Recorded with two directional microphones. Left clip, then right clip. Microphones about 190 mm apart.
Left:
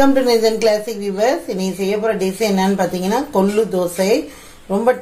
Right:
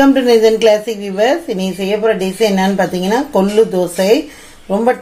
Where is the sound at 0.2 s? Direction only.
35° right (ahead or behind).